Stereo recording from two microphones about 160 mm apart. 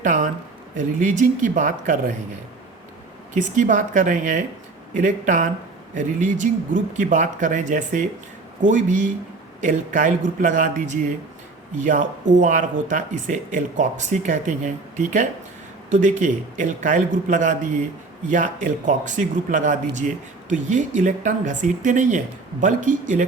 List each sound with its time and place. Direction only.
0.0 s a sound: 50° right (ahead or behind)
0.8 s speech: 50° right (ahead or behind)
3.3 s speech: 50° right (ahead or behind)